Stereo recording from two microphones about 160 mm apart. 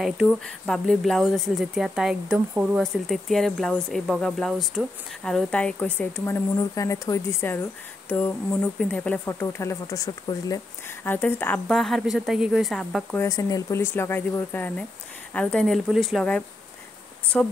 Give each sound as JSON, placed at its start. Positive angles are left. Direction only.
{"t": 0.0, "sound": "speech", "side_deg": -5}
{"t": 6.5, "sound": "speech", "side_deg": 20}
{"t": 13.1, "sound": "speech", "side_deg": 20}